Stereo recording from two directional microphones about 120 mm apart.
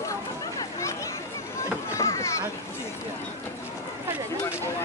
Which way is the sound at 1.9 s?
25° left (ahead or behind).